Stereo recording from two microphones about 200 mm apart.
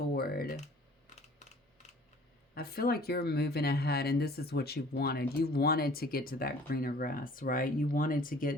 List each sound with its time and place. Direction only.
0.1 s computer keyboard: 50° left (ahead or behind)
2.6 s speech: 50° left (ahead or behind)